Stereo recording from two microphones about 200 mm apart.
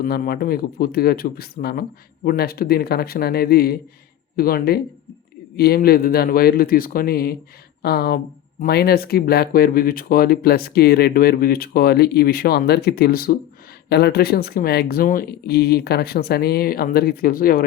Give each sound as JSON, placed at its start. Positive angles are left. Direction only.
{"t": 0.0, "sound": "speech", "side_deg": 50}